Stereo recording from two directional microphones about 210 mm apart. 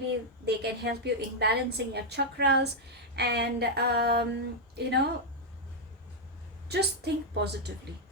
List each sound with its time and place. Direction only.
0.4 s a woman's voice: 50° right (ahead or behind)
6.7 s a woman's voice: 50° right (ahead or behind)